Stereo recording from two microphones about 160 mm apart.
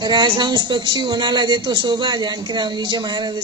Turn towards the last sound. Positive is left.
turn(degrees=-25)  # may be behind; listen again after turning